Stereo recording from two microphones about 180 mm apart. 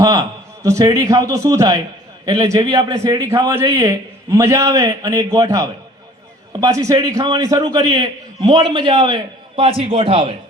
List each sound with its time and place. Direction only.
0.6 s a man's voice: 20° right (ahead or behind)